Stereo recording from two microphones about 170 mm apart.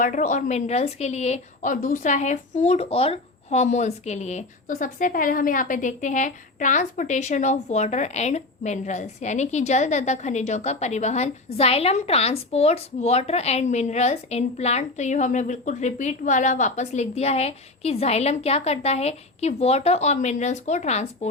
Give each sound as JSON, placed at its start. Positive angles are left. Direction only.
{"t": 0.0, "sound": "a woman's voice", "side_deg": 50}